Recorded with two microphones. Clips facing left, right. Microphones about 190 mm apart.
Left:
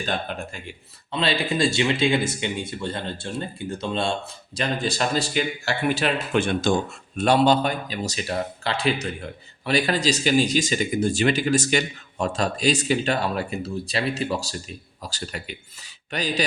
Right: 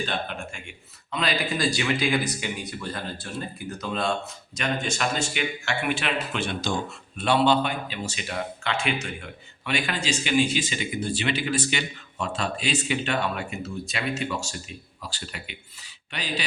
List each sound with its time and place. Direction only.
0.0 s speech: 40° left (ahead or behind)